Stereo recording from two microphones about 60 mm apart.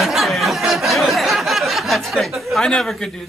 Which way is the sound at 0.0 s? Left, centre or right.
Centre.